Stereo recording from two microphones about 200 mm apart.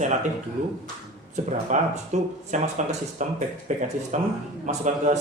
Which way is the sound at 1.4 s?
35° right (ahead or behind).